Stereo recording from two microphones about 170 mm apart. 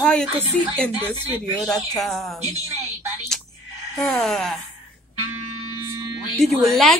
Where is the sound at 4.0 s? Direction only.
5° left (ahead or behind).